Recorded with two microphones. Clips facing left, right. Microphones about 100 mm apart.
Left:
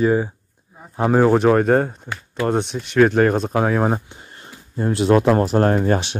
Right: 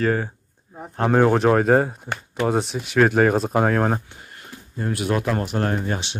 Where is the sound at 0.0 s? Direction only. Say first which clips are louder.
Left 4 dB; 15° left (ahead or behind).